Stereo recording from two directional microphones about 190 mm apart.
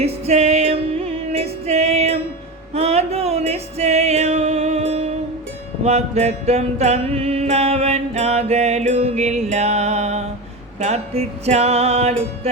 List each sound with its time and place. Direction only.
0.0 s music: 35° right (ahead or behind)